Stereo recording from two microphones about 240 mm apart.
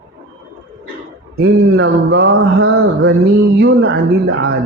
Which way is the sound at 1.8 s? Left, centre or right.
Right.